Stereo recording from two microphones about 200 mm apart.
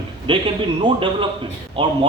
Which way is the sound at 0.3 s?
25° right (ahead or behind).